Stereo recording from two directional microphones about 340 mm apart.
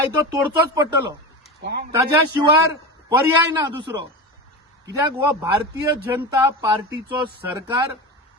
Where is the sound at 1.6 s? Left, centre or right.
Right.